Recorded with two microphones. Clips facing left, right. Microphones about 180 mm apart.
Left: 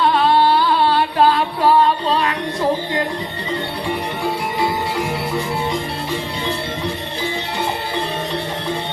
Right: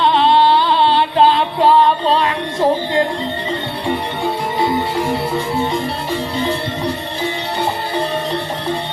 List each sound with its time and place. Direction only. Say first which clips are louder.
0.0 s music: right 2 dB; 25° right (ahead or behind)